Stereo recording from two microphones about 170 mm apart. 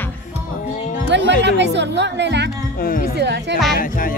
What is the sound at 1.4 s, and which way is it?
Speech, 90° right.